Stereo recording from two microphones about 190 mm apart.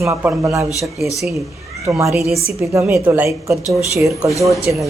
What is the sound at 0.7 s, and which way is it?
Speech, centre (ahead or behind).